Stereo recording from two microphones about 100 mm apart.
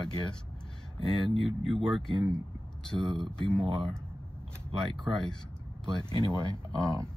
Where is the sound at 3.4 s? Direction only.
60° right (ahead or behind).